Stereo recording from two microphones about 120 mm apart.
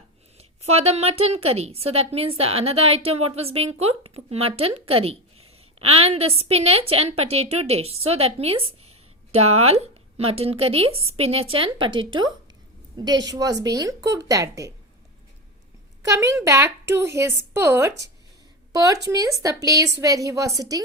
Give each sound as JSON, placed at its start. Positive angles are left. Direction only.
{"t": 0.3, "sound": "a woman's voice", "side_deg": -60}
{"t": 16.0, "sound": "a woman's voice", "side_deg": -25}